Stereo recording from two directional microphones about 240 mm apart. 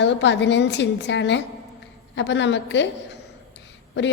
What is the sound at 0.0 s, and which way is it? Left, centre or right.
A woman's voice, left.